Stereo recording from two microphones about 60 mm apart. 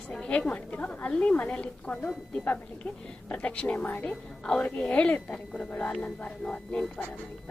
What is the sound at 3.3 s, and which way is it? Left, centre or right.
Speech, left.